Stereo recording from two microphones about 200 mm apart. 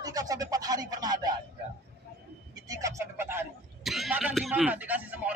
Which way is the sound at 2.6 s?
15° right (ahead or behind).